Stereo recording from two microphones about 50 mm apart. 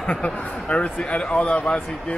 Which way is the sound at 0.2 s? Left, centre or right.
Left.